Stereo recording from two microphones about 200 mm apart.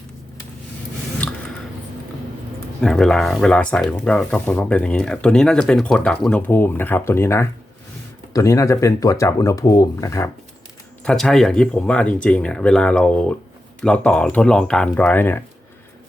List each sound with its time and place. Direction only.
1.2 s a sound: 5° left (ahead or behind)
2.8 s speech: 5° left (ahead or behind)
11.0 s speech: 5° left (ahead or behind)